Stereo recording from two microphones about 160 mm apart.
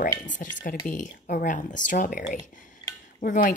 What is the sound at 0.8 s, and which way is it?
A woman's voice, 55° left (ahead or behind).